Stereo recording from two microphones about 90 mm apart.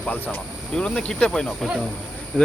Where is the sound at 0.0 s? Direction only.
20° left (ahead or behind).